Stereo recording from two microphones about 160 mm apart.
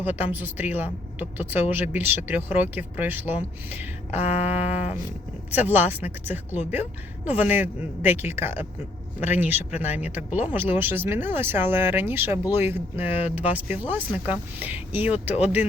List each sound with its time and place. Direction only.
0.0 s speech: 10° right (ahead or behind)
4.3 s a sound: 40° left (ahead or behind)
5.5 s speech: 10° right (ahead or behind)